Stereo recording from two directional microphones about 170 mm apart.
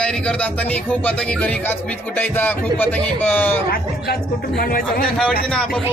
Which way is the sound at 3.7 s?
65° left (ahead or behind).